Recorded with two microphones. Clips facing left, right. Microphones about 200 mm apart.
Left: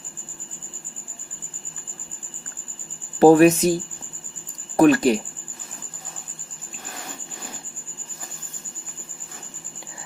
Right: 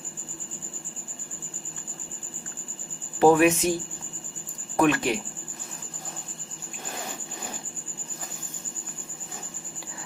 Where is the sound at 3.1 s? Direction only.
35° left (ahead or behind).